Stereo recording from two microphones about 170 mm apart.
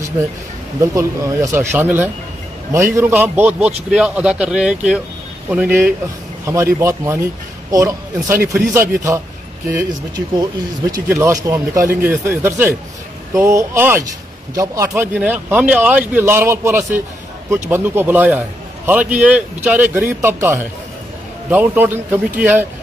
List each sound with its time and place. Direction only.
0.7 s a man's voice: 20° right (ahead or behind)
8.5 s a man's voice: 5° right (ahead or behind)
9.7 s a man's voice: 20° right (ahead or behind)
15.0 s a man's voice: 10° right (ahead or behind)